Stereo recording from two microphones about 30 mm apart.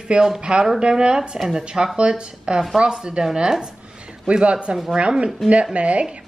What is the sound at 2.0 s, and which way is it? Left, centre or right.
Speech, right.